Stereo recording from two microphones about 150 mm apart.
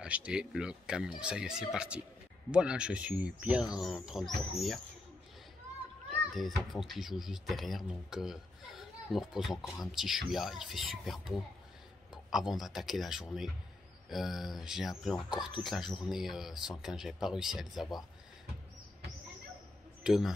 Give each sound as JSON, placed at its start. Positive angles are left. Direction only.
{"t": 0.0, "sound": "speech", "side_deg": -5}
{"t": 6.0, "sound": "speech", "side_deg": 0}
{"t": 20.0, "sound": "a man's voice", "side_deg": 0}